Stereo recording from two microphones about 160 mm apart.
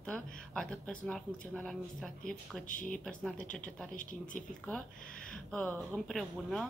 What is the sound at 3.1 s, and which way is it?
A woman's voice, 5° left (ahead or behind).